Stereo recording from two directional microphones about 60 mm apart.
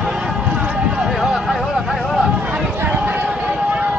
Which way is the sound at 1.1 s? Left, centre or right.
Centre.